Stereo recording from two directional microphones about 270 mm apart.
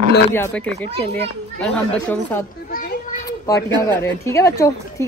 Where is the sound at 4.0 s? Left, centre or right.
Centre.